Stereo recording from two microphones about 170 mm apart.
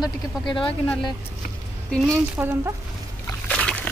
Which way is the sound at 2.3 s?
15° right (ahead or behind).